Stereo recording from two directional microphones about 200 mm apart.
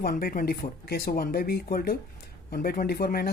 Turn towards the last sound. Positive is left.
turn(degrees=50)  # may be behind; listen again after turning